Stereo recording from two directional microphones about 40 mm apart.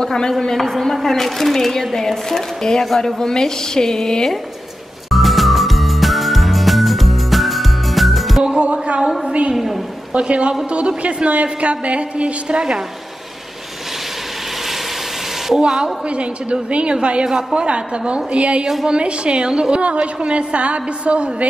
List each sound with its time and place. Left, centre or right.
0.0 s speech: centre
5.1 s music: centre
8.5 s music: right
9.5 s a woman's voice: centre
10.1 s a woman's voice: right
15.6 s a woman's voice: centre
17.3 s a woman's voice: centre
17.6 s a woman's voice: right